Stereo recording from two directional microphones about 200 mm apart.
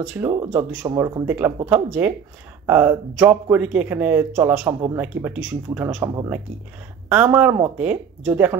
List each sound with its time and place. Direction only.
0.0 s speech: 10° right (ahead or behind)